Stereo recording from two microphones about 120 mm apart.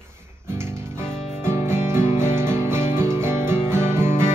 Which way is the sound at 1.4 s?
20° right (ahead or behind).